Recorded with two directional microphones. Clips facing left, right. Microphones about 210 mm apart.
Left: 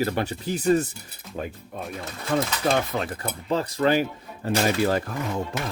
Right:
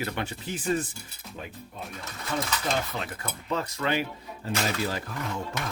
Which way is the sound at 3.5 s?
30° left (ahead or behind).